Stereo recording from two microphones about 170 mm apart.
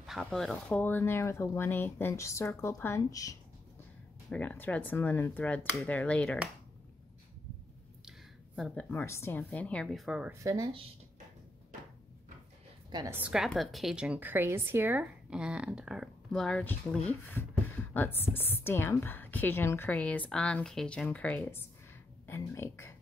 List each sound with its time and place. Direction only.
0.0 s a woman's voice: centre (ahead or behind); by 3.3 s 20° left (ahead or behind)
4.3 s a woman's voice: 10° left (ahead or behind)
8.5 s speech: centre (ahead or behind)
8.9 s a woman's voice: 15° left (ahead or behind); by 10.3 s centre (ahead or behind)
10.4 s speech: 20° right (ahead or behind)
12.9 s speech: 20° right (ahead or behind)
13.2 s a woman's voice: 5° right (ahead or behind); by 21.6 s 15° left (ahead or behind)
22.2 s a sound: 15° left (ahead or behind)